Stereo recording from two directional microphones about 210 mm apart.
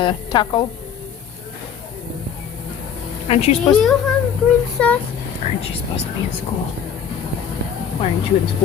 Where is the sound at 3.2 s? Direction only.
30° left (ahead or behind).